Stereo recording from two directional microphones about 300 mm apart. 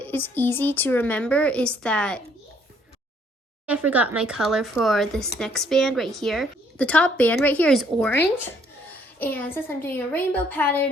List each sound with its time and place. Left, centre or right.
0.0 s speech: centre
3.7 s speech: centre